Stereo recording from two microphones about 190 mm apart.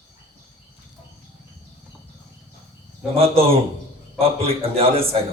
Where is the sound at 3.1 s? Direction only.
30° right (ahead or behind).